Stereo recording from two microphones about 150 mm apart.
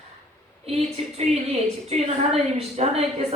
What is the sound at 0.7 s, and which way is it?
A woman's voice, 40° right (ahead or behind).